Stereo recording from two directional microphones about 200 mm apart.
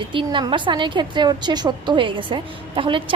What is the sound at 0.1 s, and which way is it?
A woman's voice, 25° right (ahead or behind).